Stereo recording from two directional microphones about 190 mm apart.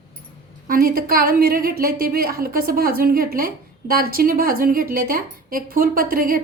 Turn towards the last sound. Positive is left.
turn(degrees=-50)  # may be behind; listen again after turning